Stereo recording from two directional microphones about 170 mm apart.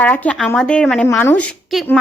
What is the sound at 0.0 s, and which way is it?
A woman's voice, 10° left (ahead or behind).